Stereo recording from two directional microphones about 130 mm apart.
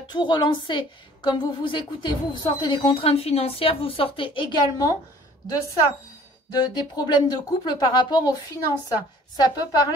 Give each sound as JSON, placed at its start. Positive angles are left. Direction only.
{"t": 0.1, "sound": "a woman's voice", "side_deg": 35}
{"t": 6.6, "sound": "a woman's voice", "side_deg": 35}